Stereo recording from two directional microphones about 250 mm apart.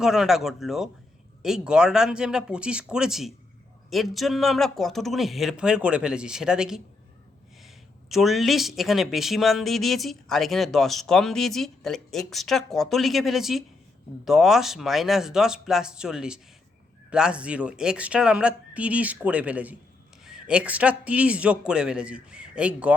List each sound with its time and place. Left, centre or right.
0.0 s speech: centre
8.1 s speech: centre